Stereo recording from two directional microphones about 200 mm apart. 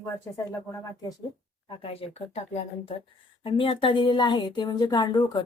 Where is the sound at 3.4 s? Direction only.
25° left (ahead or behind).